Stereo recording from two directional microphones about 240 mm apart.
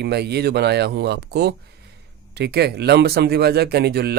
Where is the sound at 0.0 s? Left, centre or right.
Right.